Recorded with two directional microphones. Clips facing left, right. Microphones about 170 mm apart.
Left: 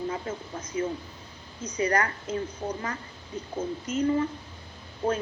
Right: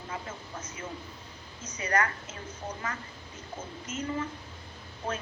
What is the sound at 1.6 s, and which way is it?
Speech, 35° left (ahead or behind).